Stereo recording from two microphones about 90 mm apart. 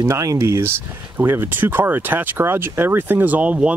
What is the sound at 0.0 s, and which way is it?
Speech, 30° right (ahead or behind).